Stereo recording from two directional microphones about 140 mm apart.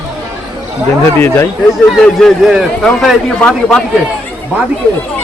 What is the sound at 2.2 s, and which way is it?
A man's voice, centre (ahead or behind).